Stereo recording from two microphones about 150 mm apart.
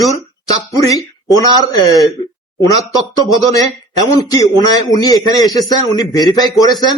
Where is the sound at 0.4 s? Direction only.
25° left (ahead or behind).